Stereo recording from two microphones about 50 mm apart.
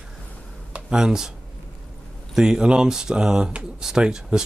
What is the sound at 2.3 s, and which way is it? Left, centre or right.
Speech, centre.